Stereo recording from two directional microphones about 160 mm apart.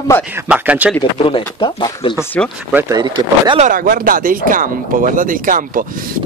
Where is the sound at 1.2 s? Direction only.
30° left (ahead or behind).